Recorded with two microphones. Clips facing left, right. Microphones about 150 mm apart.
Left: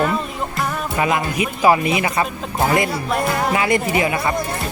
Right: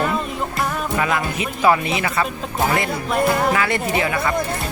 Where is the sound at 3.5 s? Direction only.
15° left (ahead or behind).